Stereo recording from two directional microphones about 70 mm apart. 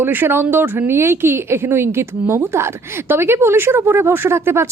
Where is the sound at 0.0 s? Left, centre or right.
Right.